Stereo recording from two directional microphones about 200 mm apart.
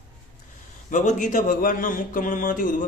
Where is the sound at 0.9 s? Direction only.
40° left (ahead or behind).